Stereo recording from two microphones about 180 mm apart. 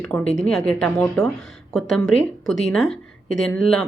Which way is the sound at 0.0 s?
10° left (ahead or behind).